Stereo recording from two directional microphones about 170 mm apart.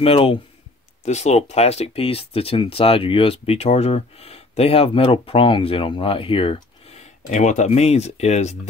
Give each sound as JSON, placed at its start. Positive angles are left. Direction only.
{"t": 0.0, "sound": "speech", "side_deg": 35}